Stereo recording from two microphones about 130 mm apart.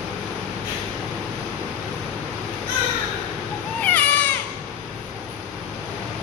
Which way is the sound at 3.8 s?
10° left (ahead or behind).